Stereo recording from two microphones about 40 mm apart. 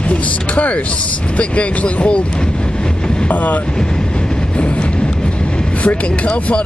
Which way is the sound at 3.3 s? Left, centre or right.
Left.